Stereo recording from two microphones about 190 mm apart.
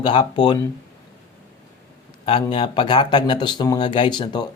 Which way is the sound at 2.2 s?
25° left (ahead or behind).